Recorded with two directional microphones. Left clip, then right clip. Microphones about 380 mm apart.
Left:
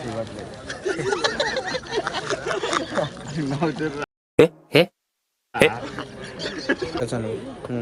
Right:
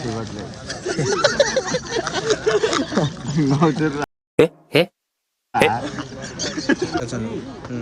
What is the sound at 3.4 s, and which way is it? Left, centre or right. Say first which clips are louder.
Speech: right 6 dB; centre.